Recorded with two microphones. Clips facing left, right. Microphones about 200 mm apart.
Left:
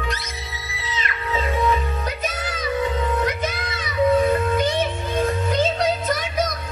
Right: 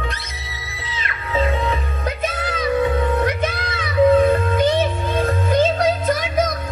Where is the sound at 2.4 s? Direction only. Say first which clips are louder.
Right 5 dB; 55° right (ahead or behind).